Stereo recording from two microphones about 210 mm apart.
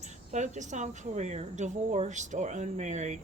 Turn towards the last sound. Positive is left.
turn(degrees=-35)  # may be behind; listen again after turning